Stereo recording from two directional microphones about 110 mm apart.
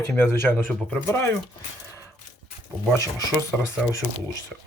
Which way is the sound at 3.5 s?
10° right (ahead or behind).